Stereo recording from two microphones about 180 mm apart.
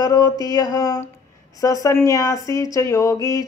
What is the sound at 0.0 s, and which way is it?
Speech, 20° left (ahead or behind).